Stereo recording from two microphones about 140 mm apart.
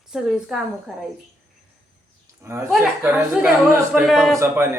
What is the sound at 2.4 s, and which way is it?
Speech, 20° right (ahead or behind).